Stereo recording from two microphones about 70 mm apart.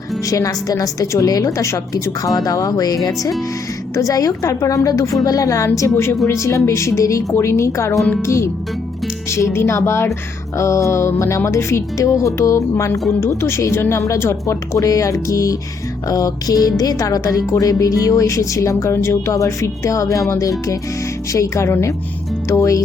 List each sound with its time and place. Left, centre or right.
0.3 s a woman's voice: left
1.9 s a woman's voice: left
12.7 s a woman's voice: left
16.7 s a woman's voice: left
17.5 s speech: left